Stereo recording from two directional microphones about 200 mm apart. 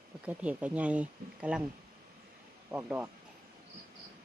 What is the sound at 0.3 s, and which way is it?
Speech, 5° right (ahead or behind).